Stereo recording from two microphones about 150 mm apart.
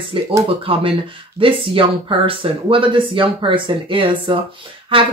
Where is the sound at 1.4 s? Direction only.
35° right (ahead or behind).